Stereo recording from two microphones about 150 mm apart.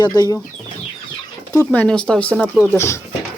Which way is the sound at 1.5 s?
10° left (ahead or behind).